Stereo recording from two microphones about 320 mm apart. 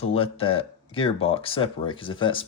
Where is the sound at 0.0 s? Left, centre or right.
Centre.